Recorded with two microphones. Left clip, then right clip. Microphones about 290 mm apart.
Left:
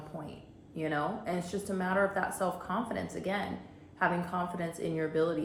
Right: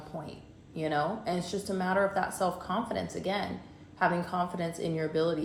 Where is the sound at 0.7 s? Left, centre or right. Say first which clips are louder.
Right 3 dB; centre.